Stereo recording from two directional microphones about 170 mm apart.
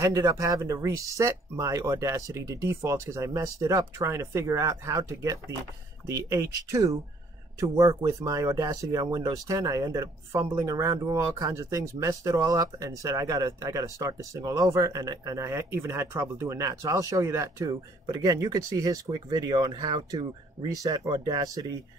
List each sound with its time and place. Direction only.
0.0 s speech: 20° right (ahead or behind)